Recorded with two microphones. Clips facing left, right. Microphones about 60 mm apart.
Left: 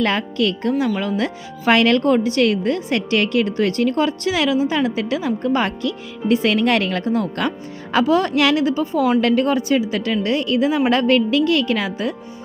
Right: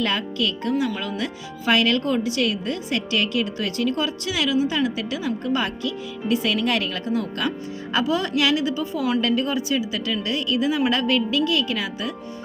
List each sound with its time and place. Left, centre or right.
0.0 s speech: left
9.2 s speech: left